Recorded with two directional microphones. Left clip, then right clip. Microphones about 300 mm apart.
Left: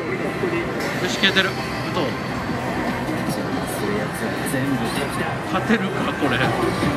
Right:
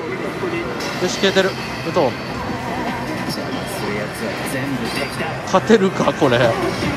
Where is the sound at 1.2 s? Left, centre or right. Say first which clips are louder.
Right 2 dB; centre.